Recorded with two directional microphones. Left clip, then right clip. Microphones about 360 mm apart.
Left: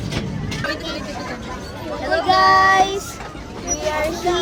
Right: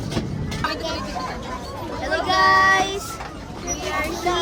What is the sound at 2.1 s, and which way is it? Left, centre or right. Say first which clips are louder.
Child singing: left 3 dB; centre.